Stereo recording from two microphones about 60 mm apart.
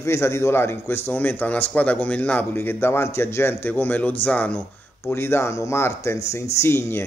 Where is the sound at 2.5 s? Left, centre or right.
Left.